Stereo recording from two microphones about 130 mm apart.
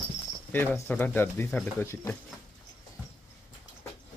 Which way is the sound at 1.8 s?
20° left (ahead or behind).